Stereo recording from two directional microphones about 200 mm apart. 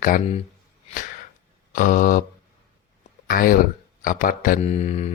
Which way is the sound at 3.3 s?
45° left (ahead or behind).